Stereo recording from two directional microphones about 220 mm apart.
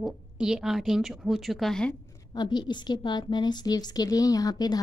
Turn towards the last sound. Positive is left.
turn(degrees=15)  # may be behind; listen again after turning